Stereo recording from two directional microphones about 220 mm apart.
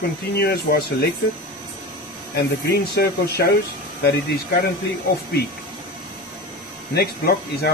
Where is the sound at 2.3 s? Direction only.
45° left (ahead or behind).